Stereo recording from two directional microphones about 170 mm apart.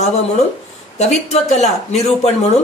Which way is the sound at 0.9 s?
40° left (ahead or behind).